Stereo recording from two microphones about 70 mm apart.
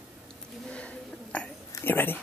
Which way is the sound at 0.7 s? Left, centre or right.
Centre.